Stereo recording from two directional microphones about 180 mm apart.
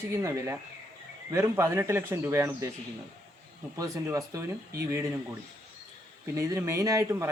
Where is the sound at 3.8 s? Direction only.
15° right (ahead or behind).